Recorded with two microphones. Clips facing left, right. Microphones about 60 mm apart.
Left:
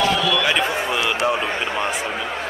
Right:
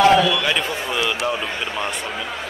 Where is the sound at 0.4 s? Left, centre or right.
Centre.